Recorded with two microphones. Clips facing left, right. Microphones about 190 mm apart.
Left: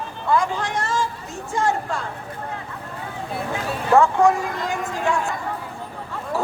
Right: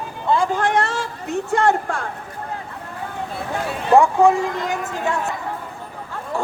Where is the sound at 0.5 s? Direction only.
60° right (ahead or behind).